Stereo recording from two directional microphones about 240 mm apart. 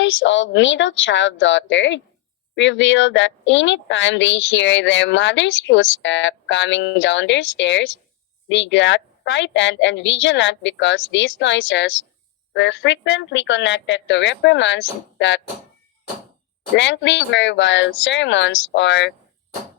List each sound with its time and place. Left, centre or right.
0.0 s speech: left
16.7 s speech: left